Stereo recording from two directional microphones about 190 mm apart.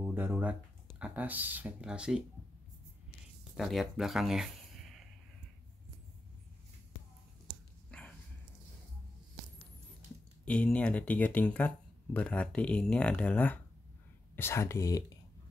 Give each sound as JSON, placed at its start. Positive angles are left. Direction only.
{"t": 0.0, "sound": "speech", "side_deg": -10}
{"t": 3.5, "sound": "speech", "side_deg": 0}
{"t": 10.4, "sound": "speech", "side_deg": 5}